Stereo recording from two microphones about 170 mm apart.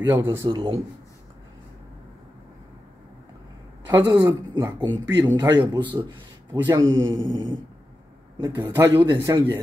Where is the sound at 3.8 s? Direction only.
20° right (ahead or behind).